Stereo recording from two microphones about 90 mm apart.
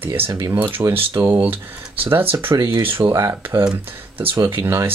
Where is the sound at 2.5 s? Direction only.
50° right (ahead or behind).